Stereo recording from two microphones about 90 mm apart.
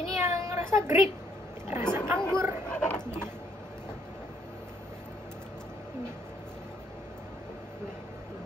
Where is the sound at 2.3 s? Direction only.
35° right (ahead or behind).